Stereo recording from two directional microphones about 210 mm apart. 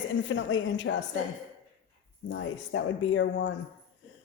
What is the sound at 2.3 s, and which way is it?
A woman's voice, 65° left (ahead or behind).